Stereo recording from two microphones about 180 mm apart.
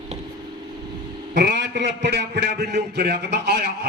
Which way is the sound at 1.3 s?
70° right (ahead or behind).